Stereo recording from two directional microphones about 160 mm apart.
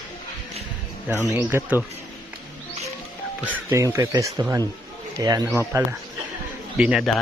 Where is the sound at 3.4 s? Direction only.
10° right (ahead or behind).